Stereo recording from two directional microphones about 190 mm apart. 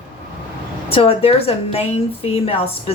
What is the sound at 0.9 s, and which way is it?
A woman's voice, 30° left (ahead or behind).